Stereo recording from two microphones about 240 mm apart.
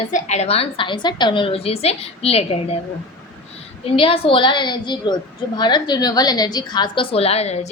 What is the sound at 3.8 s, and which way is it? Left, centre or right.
A woman's voice, left.